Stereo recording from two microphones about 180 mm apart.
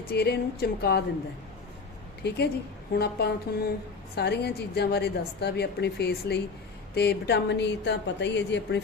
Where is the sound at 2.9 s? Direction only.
65° left (ahead or behind).